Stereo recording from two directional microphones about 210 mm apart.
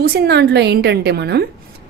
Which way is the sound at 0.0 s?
50° right (ahead or behind).